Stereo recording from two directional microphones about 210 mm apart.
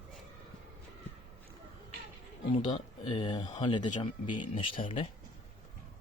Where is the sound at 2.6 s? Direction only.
20° left (ahead or behind).